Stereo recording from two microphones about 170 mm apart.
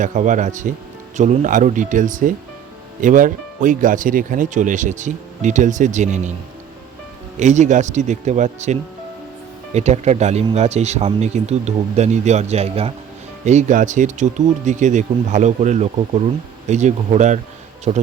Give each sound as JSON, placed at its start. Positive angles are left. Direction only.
{"t": 0.0, "sound": "speech", "side_deg": -45}
{"t": 7.3, "sound": "speech", "side_deg": -45}